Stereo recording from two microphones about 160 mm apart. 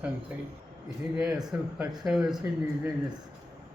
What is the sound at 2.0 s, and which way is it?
Speech, 5° right (ahead or behind).